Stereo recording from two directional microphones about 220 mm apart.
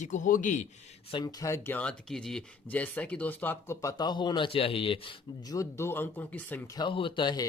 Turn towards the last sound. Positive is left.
turn(degrees=20)  # may be behind; listen again after turning